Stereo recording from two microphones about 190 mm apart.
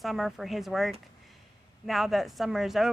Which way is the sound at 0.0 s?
Centre (ahead or behind).